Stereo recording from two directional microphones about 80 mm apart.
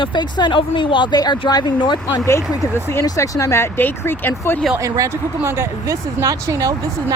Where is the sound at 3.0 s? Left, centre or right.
Left.